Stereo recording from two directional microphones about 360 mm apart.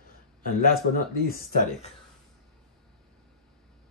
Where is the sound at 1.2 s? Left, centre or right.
Left.